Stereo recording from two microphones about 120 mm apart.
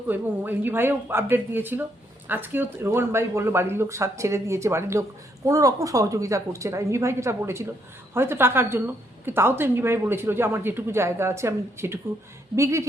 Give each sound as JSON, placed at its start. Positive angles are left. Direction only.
{"t": 0.1, "sound": "a woman's voice", "side_deg": -15}